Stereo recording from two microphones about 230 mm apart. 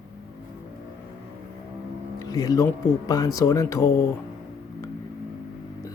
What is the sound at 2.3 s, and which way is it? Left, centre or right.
Speech, centre.